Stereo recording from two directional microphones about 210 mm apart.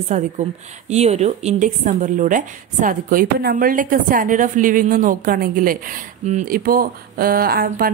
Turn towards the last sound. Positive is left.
turn(degrees=-45)  # may be behind; listen again after turning